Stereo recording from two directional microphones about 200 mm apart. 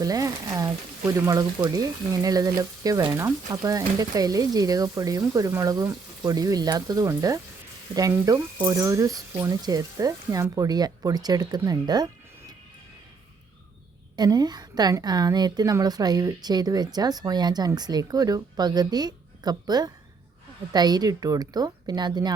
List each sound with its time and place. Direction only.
0.0 s speech: 15° right (ahead or behind)
14.2 s a woman's voice: 20° right (ahead or behind)